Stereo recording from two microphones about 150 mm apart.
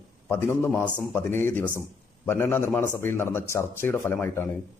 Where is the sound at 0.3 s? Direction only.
15° left (ahead or behind).